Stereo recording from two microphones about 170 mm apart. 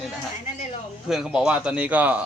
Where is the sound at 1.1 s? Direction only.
5° right (ahead or behind).